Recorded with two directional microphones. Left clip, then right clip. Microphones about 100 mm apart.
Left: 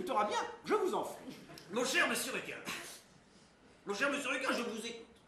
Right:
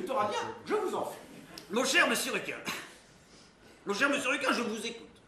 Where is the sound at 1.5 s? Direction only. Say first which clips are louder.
Right 6 dB; 25° right (ahead or behind).